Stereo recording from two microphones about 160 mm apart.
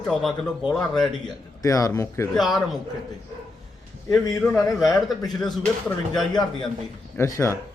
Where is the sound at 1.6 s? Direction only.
20° left (ahead or behind).